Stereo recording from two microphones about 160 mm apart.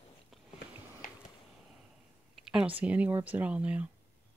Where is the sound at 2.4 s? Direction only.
5° right (ahead or behind).